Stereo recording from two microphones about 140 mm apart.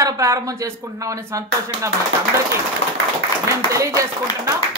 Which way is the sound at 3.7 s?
25° right (ahead or behind).